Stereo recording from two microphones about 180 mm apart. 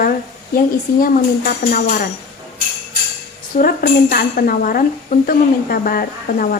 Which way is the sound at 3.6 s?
50° left (ahead or behind).